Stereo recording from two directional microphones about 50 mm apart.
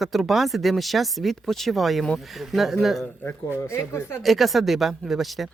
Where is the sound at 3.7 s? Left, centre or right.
Left.